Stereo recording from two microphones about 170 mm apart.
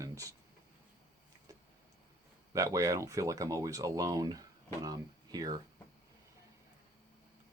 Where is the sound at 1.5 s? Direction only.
20° right (ahead or behind).